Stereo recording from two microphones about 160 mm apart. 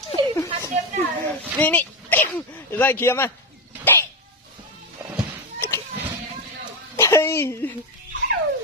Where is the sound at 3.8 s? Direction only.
15° left (ahead or behind).